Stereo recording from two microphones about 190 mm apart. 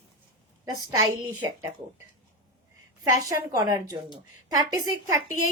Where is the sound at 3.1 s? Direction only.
20° right (ahead or behind).